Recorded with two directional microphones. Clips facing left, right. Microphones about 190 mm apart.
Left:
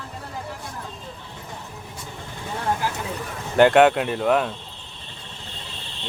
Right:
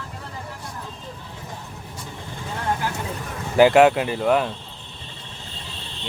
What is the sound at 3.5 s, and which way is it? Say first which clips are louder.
Speech: right 1 dB; 5° right (ahead or behind).